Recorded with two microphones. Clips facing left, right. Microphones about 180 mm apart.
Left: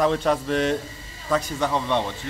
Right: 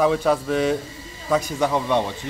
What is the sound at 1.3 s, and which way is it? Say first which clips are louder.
Music: right 3 dB; 10° right (ahead or behind).